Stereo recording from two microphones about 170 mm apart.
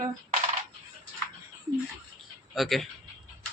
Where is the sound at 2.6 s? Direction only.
Centre (ahead or behind).